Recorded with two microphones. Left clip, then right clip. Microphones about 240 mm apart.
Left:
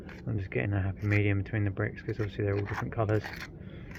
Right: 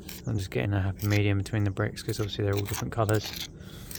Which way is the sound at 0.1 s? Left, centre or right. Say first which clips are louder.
Right 2 dB; right.